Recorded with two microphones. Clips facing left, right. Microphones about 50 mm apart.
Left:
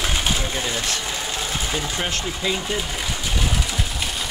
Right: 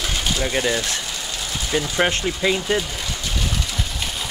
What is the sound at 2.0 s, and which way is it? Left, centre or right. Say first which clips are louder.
Speech: right 5 dB; right.